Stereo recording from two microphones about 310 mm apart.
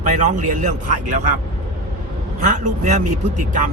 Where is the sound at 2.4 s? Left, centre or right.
Right.